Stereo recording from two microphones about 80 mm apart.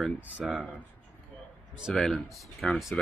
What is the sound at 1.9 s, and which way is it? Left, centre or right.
Speech, centre.